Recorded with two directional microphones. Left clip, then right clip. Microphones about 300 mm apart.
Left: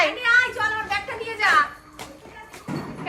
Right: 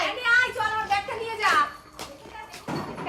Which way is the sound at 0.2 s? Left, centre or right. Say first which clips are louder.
Left 3 dB; right.